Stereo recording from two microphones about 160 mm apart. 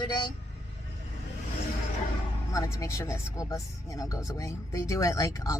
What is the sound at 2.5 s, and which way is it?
Speech, 20° left (ahead or behind).